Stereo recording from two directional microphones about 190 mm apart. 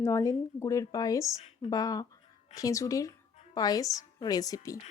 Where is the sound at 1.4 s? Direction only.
35° left (ahead or behind).